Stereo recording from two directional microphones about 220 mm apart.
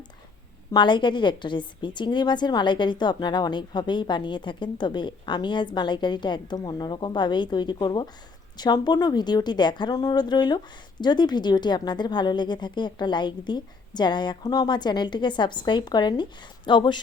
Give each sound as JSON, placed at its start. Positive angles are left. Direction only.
{"t": 0.7, "sound": "a woman's voice", "side_deg": 20}